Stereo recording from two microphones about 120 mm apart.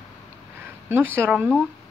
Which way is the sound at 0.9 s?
20° right (ahead or behind).